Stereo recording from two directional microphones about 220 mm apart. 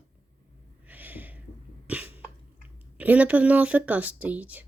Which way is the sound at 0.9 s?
10° right (ahead or behind).